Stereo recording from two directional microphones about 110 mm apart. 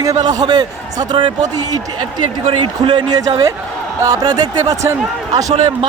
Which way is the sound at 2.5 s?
50° right (ahead or behind).